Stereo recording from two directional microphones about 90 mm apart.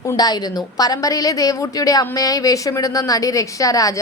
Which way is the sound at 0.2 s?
50° left (ahead or behind).